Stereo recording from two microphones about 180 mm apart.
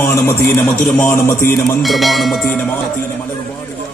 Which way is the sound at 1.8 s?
Centre (ahead or behind).